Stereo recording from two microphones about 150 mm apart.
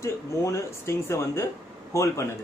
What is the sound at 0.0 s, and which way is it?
Speech, 20° left (ahead or behind).